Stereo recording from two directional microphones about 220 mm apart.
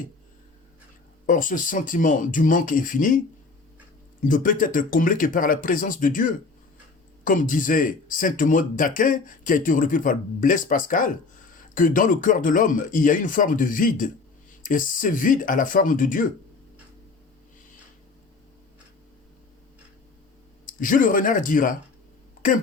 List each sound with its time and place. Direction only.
1.3 s speech: 40° left (ahead or behind)
4.2 s speech: 35° left (ahead or behind)
20.7 s speech: 35° left (ahead or behind)